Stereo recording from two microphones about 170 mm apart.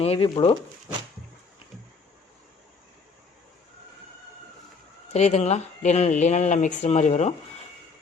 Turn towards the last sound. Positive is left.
turn(degrees=40)  # may be behind; listen again after turning